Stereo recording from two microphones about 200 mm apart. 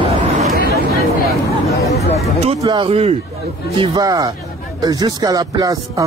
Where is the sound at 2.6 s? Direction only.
25° right (ahead or behind).